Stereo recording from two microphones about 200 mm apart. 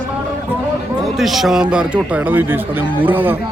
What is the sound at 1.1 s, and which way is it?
Speech, centre (ahead or behind).